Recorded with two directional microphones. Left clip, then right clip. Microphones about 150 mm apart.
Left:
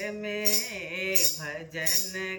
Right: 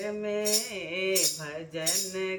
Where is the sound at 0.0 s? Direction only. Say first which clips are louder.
Right 1 dB; 10° right (ahead or behind).